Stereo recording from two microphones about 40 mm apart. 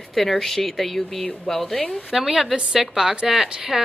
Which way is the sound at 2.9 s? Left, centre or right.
Centre.